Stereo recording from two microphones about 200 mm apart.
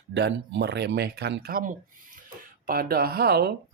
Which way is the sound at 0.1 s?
60° right (ahead or behind).